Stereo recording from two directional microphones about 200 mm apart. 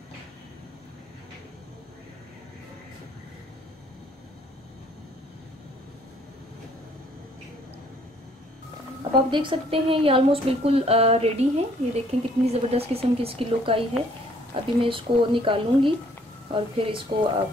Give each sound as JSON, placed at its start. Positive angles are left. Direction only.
{"t": 9.3, "sound": "speech", "side_deg": -25}